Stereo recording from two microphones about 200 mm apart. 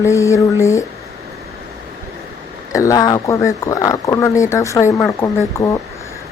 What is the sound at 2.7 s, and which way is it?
Speech, 15° left (ahead or behind).